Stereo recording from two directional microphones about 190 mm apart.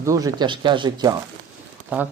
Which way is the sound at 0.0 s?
15° right (ahead or behind).